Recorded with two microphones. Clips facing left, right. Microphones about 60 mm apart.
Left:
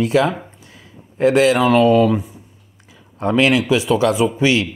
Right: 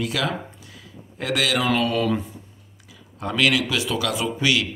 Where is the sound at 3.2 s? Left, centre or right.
Left.